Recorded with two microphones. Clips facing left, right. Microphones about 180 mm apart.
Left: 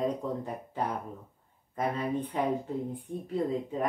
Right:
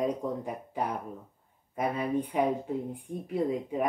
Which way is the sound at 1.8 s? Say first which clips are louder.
Right 1 dB; 10° right (ahead or behind).